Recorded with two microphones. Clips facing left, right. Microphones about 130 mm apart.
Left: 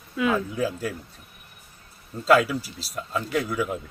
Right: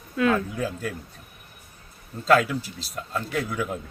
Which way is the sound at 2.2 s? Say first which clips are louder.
Left 1 dB; 5° left (ahead or behind).